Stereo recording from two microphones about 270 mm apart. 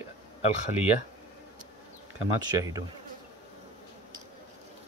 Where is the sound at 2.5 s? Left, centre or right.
Centre.